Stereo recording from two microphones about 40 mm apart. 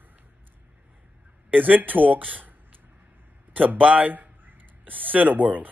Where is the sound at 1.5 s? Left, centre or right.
Right.